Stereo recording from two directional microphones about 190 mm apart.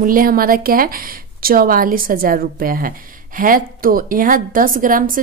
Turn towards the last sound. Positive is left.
turn(degrees=-45)  # may be behind; listen again after turning